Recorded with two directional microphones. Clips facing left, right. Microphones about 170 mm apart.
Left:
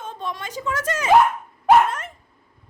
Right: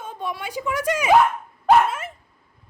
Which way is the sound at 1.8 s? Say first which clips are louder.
Even; 5° right (ahead or behind).